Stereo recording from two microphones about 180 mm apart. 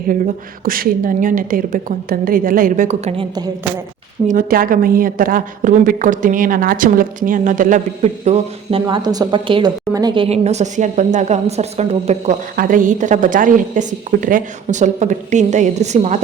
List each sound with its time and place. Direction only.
0.6 s a woman's voice: 50° right (ahead or behind)
4.3 s a woman's voice: 50° right (ahead or behind); by 10.2 s 25° right (ahead or behind)
10.2 s a woman's voice: 35° right (ahead or behind)
12.5 s a woman's voice: 50° right (ahead or behind)